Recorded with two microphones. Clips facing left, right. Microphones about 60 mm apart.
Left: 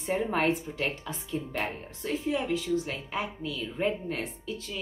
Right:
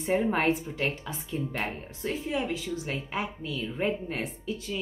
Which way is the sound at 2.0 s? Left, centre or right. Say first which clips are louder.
Left 1 dB; centre.